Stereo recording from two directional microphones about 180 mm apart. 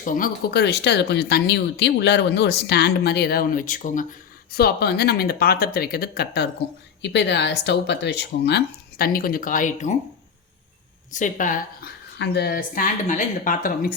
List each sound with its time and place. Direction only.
0.0 s speech: 50° left (ahead or behind)
4.5 s speech: 60° left (ahead or behind)
7.0 s speech: 75° left (ahead or behind); by 9.9 s 45° left (ahead or behind)
11.1 s speech: 45° left (ahead or behind)
12.2 s speech: 65° left (ahead or behind); by 13.9 s 50° left (ahead or behind)